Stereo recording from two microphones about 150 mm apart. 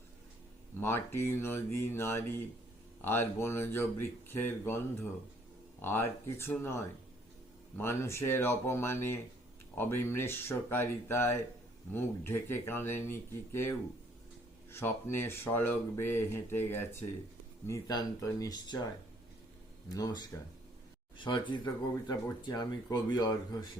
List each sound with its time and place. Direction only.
0.8 s speech: 15° left (ahead or behind)
5.8 s speech: 15° left (ahead or behind)
19.9 s speech: 25° left (ahead or behind)
21.2 s speech: 30° left (ahead or behind)